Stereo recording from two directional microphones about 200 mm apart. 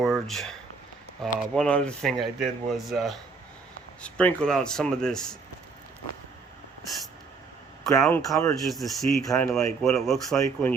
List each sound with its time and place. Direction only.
0.0 s speech: centre (ahead or behind)
8.0 s speech: 10° left (ahead or behind)
8.6 s speech: centre (ahead or behind)
9.2 s speech: 15° left (ahead or behind)
9.6 s speech: centre (ahead or behind)